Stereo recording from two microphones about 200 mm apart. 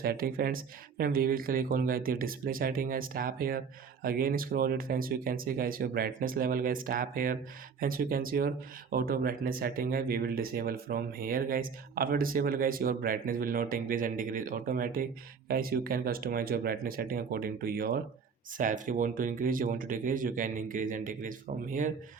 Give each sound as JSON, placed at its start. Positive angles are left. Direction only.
{"t": 0.0, "sound": "speech", "side_deg": -50}